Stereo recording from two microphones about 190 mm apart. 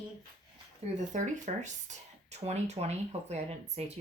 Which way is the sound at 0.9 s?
40° right (ahead or behind).